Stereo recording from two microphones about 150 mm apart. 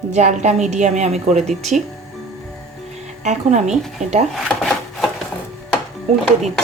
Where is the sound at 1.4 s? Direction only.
Centre (ahead or behind).